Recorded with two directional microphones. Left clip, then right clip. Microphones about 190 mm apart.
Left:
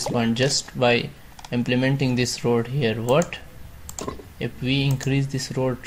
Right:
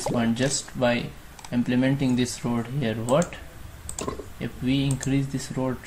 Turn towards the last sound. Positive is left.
turn(degrees=45)  # may be behind; listen again after turning